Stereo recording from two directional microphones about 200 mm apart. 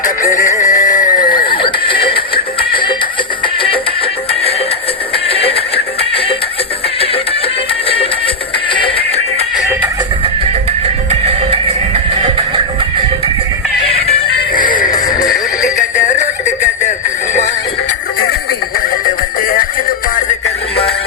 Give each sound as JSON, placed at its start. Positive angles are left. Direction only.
{"t": 0.5, "sound": "horse", "side_deg": 15}
{"t": 1.5, "sound": "music", "side_deg": 25}
{"t": 10.7, "sound": "music", "side_deg": -30}
{"t": 13.8, "sound": "music", "side_deg": 30}
{"t": 14.8, "sound": "music", "side_deg": 20}
{"t": 15.6, "sound": "music", "side_deg": 35}
{"t": 18.8, "sound": "music", "side_deg": 45}